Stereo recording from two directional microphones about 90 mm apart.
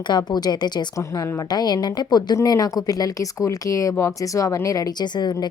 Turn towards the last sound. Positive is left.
turn(degrees=50)  # may be behind; listen again after turning